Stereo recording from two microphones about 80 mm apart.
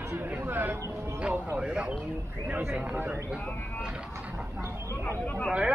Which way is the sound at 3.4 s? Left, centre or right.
Centre.